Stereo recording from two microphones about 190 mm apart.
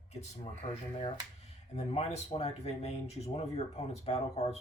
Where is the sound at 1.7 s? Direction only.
35° left (ahead or behind).